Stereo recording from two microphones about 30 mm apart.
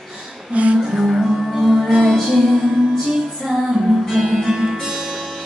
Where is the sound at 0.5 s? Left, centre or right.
Right.